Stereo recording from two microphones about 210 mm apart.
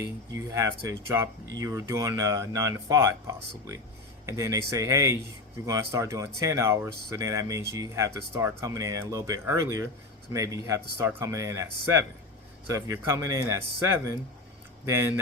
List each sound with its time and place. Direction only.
0.0 s speech: 15° right (ahead or behind)